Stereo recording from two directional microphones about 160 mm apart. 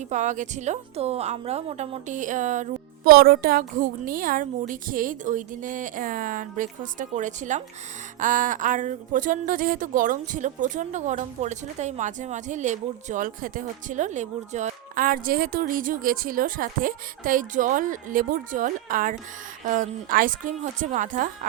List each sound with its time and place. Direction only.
0.1 s a woman's voice: 50° right (ahead or behind)